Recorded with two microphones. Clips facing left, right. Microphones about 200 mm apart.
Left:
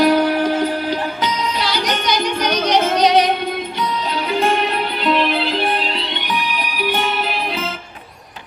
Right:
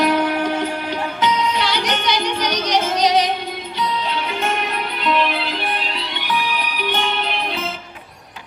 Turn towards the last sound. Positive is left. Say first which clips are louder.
# left 2 dB
turn(degrees=10)  # may be behind; listen again after turning